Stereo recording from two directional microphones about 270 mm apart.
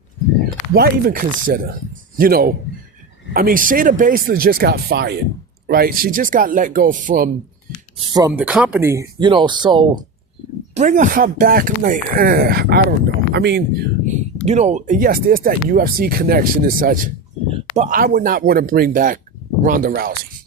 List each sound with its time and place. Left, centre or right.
0.7 s speech: right
7.9 s speech: centre